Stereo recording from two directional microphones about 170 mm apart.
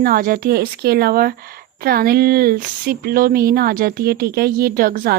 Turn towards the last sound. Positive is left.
turn(degrees=-60)  # may be behind; listen again after turning